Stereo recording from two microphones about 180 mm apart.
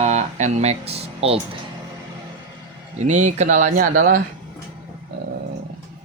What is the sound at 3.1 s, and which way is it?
Speech, 40° right (ahead or behind).